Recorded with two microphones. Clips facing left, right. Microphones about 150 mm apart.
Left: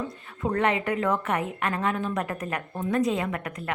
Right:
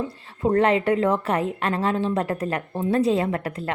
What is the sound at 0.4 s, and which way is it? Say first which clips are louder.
Speech: right 6 dB; 30° right (ahead or behind).